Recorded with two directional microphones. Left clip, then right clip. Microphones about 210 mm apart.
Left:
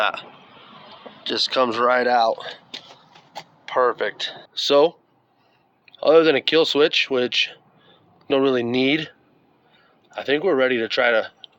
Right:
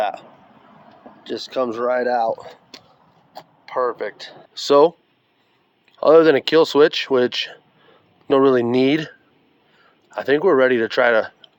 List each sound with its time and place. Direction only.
0.0 s speech: 10° right (ahead or behind)
4.6 s speech: 35° right (ahead or behind)
6.0 s speech: 35° right (ahead or behind)